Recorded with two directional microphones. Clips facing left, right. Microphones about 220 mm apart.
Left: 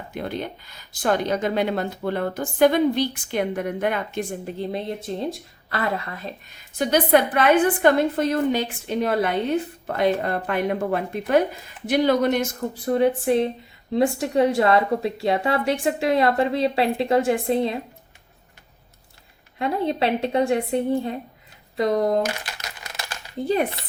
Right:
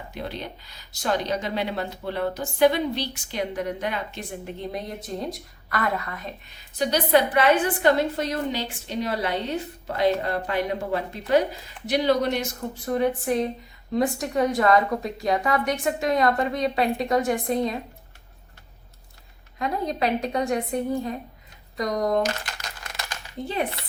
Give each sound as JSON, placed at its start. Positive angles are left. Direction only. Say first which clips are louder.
{"t": 0.1, "sound": "speech", "louder": "left 5 dB", "side_deg": 50}
{"t": 4.5, "sound": "a woman's voice", "louder": "left 5 dB", "side_deg": 25}
{"t": 6.7, "sound": "speech", "louder": "left 2 dB", "side_deg": 50}
{"t": 12.8, "sound": "a woman's voice", "louder": "left 4 dB", "side_deg": 30}
{"t": 19.5, "sound": "a woman's voice", "louder": "left 4 dB", "side_deg": 30}